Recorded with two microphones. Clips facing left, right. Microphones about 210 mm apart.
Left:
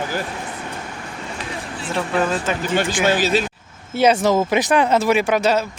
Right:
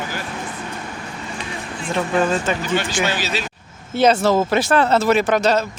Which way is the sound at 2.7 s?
50° left (ahead or behind).